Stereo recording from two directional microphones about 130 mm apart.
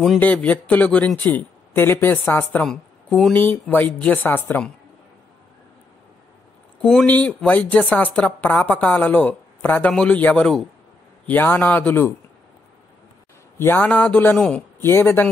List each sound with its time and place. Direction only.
0.2 s speech: 10° left (ahead or behind)
3.3 s speech: 15° left (ahead or behind)
6.8 s speech: 5° left (ahead or behind)
13.6 s speech: 15° left (ahead or behind)